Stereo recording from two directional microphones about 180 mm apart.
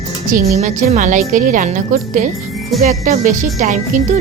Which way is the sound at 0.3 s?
45° right (ahead or behind).